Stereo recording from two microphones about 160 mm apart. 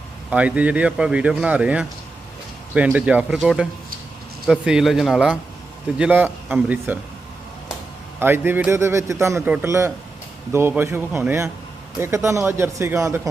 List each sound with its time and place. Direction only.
0.3 s speech: 10° right (ahead or behind)
8.2 s speech: 15° right (ahead or behind)